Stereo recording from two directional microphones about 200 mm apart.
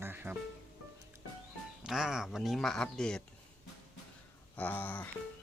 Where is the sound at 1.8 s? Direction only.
5° right (ahead or behind).